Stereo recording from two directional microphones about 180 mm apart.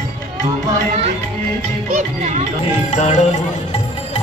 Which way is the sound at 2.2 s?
40° right (ahead or behind).